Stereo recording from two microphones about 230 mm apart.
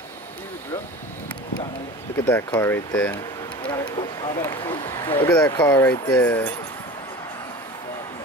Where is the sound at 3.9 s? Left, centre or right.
Centre.